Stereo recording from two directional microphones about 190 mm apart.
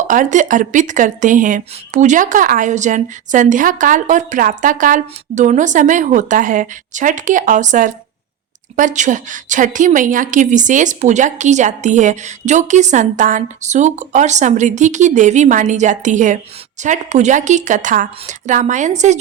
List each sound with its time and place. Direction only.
0.1 s a woman's voice: 40° right (ahead or behind)